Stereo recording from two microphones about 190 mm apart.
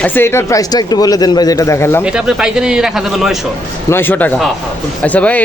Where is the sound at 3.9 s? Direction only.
10° left (ahead or behind).